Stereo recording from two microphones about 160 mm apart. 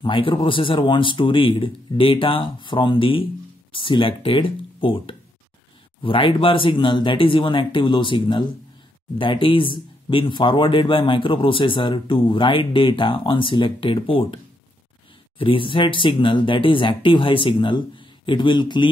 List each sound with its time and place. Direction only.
0.0 s speech: 30° left (ahead or behind)